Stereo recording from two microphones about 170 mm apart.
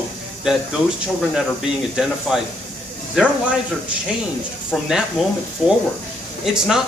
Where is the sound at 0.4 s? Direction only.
5° right (ahead or behind).